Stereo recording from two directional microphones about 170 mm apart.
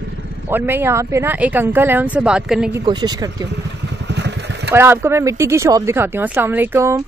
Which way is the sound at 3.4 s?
90° right.